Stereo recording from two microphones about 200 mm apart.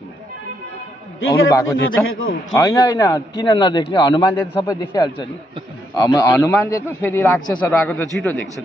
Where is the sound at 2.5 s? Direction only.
15° left (ahead or behind).